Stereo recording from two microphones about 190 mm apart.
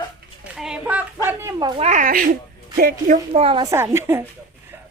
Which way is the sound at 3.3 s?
30° right (ahead or behind).